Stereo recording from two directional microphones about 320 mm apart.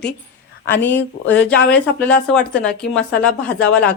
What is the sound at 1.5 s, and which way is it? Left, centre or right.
A woman's voice, centre.